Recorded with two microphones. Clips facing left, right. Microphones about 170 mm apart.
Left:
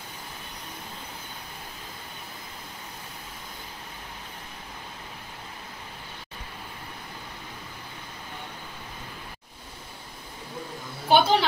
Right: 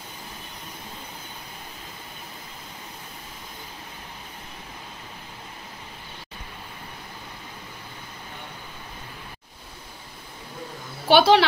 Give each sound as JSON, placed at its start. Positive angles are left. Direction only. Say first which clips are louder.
{"t": 11.1, "sound": "speech", "louder": "right 4 dB", "side_deg": -80}